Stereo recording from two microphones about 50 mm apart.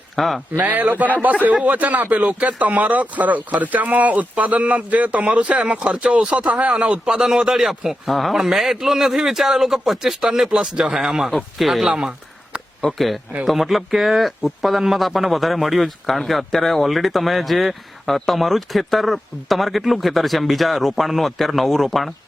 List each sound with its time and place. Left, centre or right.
0.2 s speech: centre
0.6 s a man's voice: right; by 11.9 s centre
11.9 s speech: centre
12.8 s speech: centre